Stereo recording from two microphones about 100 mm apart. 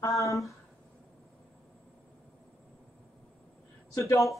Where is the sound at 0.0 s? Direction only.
30° left (ahead or behind).